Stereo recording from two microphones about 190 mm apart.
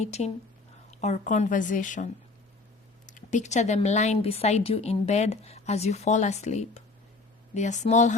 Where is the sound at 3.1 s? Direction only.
40° left (ahead or behind).